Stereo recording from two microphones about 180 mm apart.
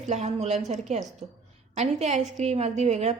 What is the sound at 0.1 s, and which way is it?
A woman's voice, 40° right (ahead or behind).